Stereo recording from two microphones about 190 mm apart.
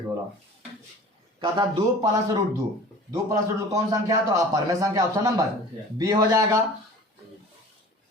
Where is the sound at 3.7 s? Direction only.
20° right (ahead or behind).